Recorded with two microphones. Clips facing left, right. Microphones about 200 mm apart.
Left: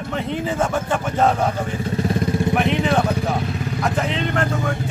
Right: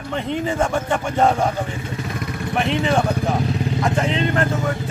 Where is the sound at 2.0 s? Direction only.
30° left (ahead or behind).